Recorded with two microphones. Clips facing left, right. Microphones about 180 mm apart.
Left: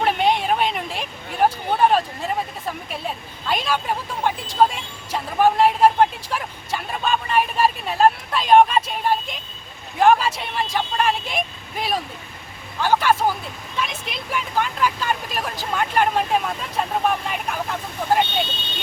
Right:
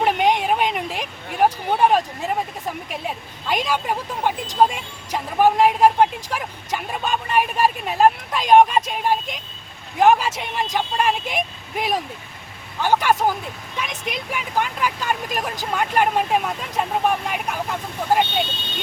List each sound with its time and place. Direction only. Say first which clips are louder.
0.0 s speech: right 1 dB; 15° right (ahead or behind)